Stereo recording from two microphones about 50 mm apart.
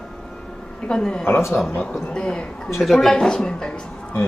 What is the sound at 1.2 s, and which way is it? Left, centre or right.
Speech, left.